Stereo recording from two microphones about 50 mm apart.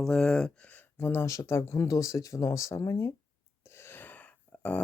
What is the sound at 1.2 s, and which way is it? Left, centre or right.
Speech, left.